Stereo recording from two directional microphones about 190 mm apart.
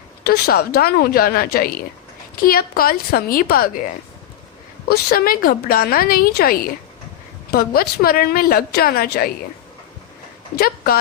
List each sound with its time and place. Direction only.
0.3 s a woman's voice: 55° left (ahead or behind)
4.9 s a woman's voice: 50° left (ahead or behind)